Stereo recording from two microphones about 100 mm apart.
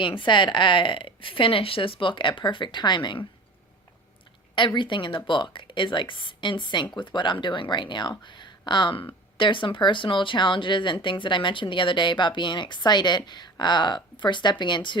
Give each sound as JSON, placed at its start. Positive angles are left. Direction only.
{"t": 0.0, "sound": "speech", "side_deg": 55}
{"t": 4.5, "sound": "speech", "side_deg": 50}